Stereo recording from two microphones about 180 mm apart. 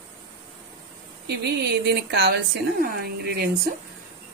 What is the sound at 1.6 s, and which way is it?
A woman's voice, 70° right (ahead or behind).